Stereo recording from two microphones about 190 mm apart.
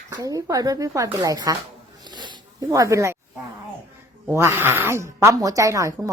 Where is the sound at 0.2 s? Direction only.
20° right (ahead or behind).